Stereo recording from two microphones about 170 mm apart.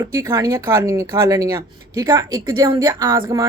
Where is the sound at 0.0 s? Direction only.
20° right (ahead or behind).